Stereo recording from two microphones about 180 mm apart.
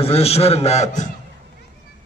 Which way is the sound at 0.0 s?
35° left (ahead or behind).